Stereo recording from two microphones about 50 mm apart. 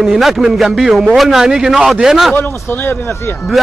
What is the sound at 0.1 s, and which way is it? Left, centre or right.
A man's voice, centre.